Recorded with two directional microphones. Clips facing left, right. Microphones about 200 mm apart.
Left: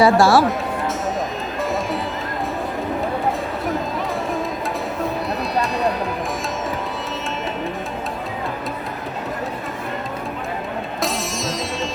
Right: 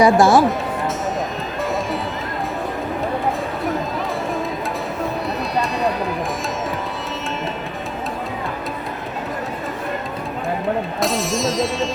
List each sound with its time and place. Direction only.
0.0 s speech: 20° right (ahead or behind)
5.0 s music: centre (ahead or behind)
11.0 s music: centre (ahead or behind)